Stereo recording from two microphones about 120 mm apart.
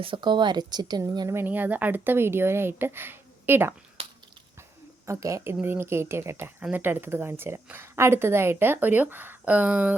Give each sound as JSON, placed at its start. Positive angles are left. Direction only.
{"t": 0.0, "sound": "speech", "side_deg": -40}
{"t": 1.3, "sound": "speech", "side_deg": -20}
{"t": 4.0, "sound": "biting", "side_deg": -55}
{"t": 5.0, "sound": "a woman's voice", "side_deg": -25}